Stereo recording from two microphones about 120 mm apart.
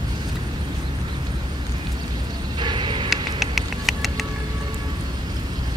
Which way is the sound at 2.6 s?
40° right (ahead or behind).